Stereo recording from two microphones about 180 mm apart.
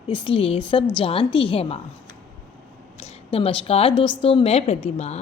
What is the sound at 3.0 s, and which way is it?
A woman's voice, 35° left (ahead or behind).